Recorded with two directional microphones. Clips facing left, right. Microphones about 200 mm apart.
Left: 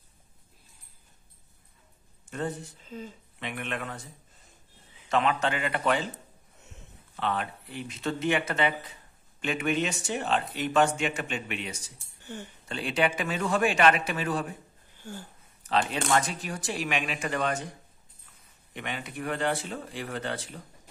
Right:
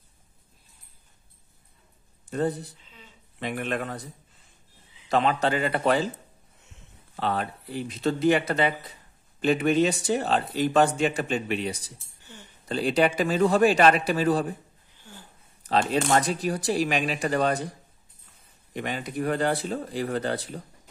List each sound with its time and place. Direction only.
2.2 s speech: 35° right (ahead or behind)
2.8 s speech: 45° left (ahead or behind)
3.3 s speech: 35° right (ahead or behind)
5.1 s speech: 35° right (ahead or behind)
7.2 s speech: 35° right (ahead or behind)
12.3 s speech: 55° left (ahead or behind)
12.6 s speech: 35° right (ahead or behind)
15.6 s speech: 35° right (ahead or behind)
18.7 s speech: 40° right (ahead or behind)